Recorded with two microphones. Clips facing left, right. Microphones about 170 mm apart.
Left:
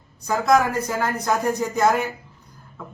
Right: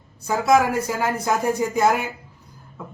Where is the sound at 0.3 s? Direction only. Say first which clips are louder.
Right 1 dB; 10° right (ahead or behind).